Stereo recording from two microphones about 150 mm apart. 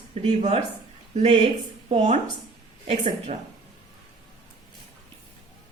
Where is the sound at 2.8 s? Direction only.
55° right (ahead or behind).